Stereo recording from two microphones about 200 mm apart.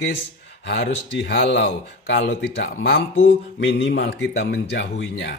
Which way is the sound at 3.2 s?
70° left (ahead or behind).